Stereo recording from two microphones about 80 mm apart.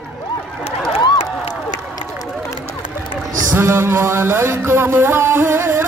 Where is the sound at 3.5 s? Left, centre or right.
Right.